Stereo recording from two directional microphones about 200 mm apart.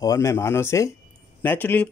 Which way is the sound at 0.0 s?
15° left (ahead or behind).